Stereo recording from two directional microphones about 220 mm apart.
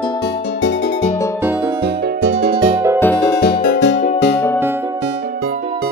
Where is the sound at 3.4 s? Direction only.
50° left (ahead or behind).